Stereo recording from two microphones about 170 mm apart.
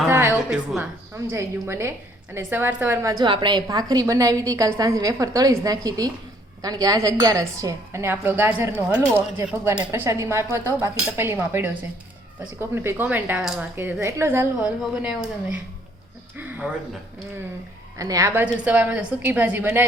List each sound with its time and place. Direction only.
0.1 s a sound: 15° right (ahead or behind)
1.1 s a woman's voice: 15° right (ahead or behind)
17.9 s a woman's voice: 20° right (ahead or behind)